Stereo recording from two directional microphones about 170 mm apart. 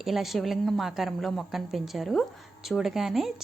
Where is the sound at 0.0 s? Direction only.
Centre (ahead or behind).